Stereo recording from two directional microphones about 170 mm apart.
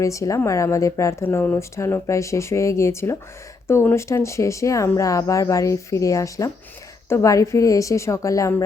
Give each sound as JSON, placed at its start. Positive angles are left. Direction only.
{"t": 0.0, "sound": "a woman's voice", "side_deg": 20}